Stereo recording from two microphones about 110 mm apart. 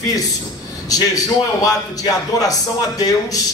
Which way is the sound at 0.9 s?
35° left (ahead or behind).